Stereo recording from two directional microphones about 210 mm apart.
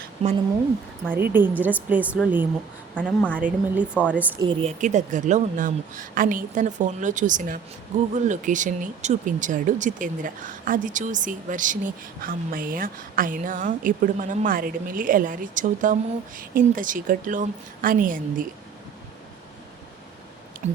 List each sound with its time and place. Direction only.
0.2 s speech: 30° right (ahead or behind)
1.3 s a woman's voice: 10° right (ahead or behind)
4.4 s a woman's voice: 30° right (ahead or behind)